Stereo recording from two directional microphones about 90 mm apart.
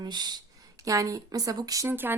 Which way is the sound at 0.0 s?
50° right (ahead or behind).